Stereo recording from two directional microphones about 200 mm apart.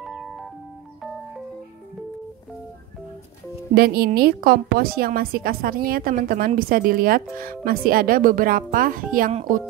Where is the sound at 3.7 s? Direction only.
50° right (ahead or behind).